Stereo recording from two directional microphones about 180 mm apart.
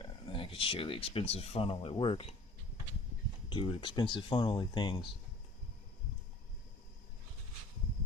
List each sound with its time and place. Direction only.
0.0 s speech: 30° left (ahead or behind)
3.5 s speech: 25° left (ahead or behind)